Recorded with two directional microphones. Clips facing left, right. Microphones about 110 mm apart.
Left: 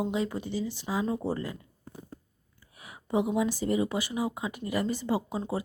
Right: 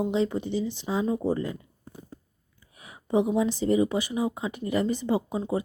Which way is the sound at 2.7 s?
25° right (ahead or behind).